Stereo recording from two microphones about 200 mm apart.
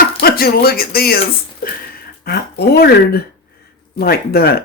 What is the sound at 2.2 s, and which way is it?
Speech, 55° left (ahead or behind).